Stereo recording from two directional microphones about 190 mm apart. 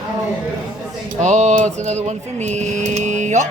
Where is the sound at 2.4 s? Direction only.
35° right (ahead or behind).